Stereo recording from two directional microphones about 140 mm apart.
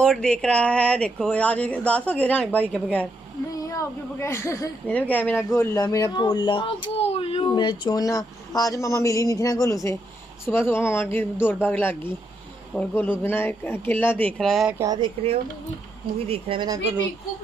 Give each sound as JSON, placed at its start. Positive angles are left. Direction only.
{"t": 0.0, "sound": "speech", "side_deg": 5}
{"t": 3.5, "sound": "speech", "side_deg": 20}
{"t": 14.8, "sound": "speech", "side_deg": -30}